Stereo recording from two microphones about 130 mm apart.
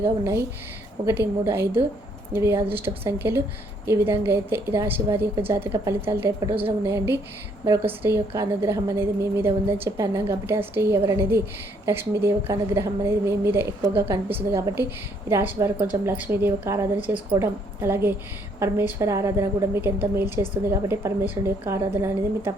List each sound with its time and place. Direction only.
0.0 s a woman's voice: 20° right (ahead or behind)